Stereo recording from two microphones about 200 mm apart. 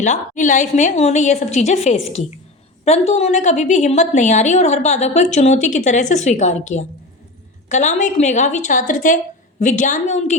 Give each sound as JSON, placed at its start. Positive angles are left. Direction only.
{"t": 0.0, "sound": "a woman's voice", "side_deg": 40}